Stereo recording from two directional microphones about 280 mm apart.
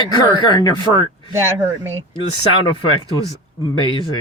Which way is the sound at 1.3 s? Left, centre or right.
Centre.